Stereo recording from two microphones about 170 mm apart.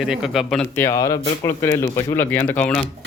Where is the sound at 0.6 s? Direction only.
15° left (ahead or behind).